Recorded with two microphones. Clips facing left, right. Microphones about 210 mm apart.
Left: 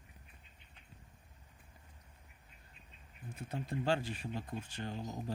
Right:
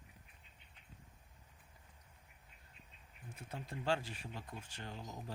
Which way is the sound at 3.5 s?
30° left (ahead or behind).